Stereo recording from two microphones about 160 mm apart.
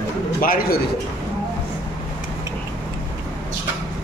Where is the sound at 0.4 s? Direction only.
65° left (ahead or behind).